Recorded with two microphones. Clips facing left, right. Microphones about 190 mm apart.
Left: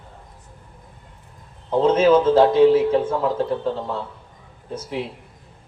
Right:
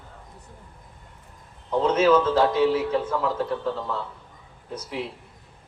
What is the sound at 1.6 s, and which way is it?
A man's voice, 30° left (ahead or behind).